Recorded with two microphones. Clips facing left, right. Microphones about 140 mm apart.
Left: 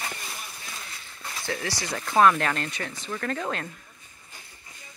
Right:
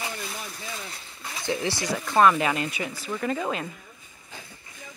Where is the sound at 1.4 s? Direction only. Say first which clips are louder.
Right 4 dB; 20° right (ahead or behind).